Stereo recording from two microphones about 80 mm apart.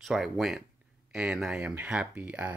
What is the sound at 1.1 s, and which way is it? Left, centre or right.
Speech, centre.